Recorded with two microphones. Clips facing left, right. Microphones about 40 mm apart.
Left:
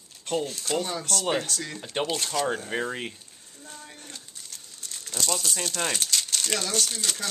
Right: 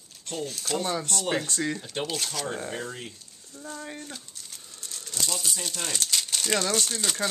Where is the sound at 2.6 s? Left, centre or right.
Left.